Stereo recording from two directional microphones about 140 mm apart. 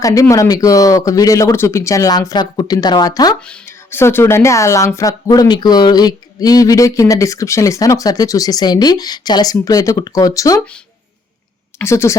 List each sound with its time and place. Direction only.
0.0 s speech: 25° left (ahead or behind)
3.4 s speech: 5° left (ahead or behind)
4.0 s speech: 20° left (ahead or behind)
11.8 s speech: 20° left (ahead or behind)